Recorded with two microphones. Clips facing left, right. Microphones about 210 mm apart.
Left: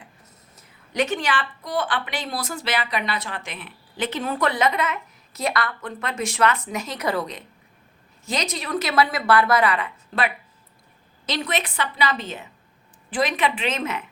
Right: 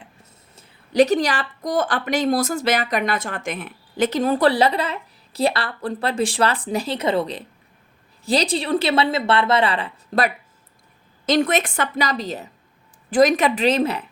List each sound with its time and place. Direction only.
0.5 s a woman's voice: 35° right (ahead or behind)